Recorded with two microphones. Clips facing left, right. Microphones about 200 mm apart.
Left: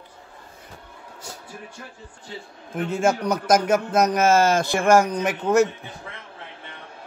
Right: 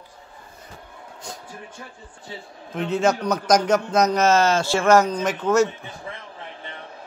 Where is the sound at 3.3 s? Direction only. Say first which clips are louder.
Even; 5° left (ahead or behind).